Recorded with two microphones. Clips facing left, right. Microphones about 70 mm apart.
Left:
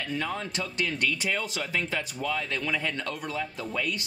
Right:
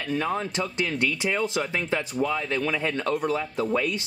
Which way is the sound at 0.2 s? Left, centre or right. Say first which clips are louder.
Right 5 dB; right.